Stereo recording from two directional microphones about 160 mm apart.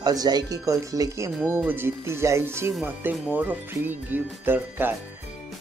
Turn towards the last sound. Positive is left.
turn(degrees=-10)  # may be behind; listen again after turning